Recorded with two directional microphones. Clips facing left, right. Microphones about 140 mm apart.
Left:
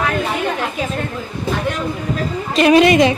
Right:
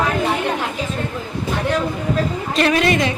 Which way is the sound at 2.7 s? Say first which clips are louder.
Left 11 dB; 20° left (ahead or behind).